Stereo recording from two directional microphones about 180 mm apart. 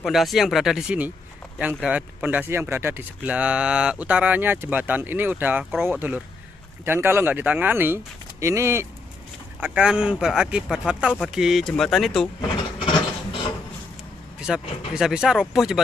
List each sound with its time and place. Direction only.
0.0 s speech: centre (ahead or behind)
12.4 s a sound: 30° left (ahead or behind)
14.5 s speech: centre (ahead or behind)